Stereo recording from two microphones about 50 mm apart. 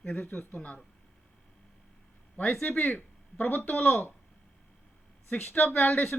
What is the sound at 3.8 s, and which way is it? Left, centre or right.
Speech, left.